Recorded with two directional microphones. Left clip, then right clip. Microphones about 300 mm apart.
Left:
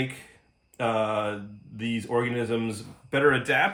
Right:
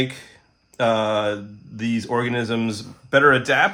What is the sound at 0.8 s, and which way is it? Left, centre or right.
Speech, centre.